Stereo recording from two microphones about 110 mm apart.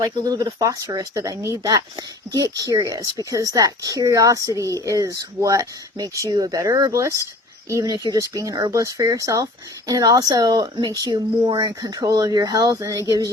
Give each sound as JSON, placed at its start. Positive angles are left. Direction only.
{"t": 0.0, "sound": "speech", "side_deg": -35}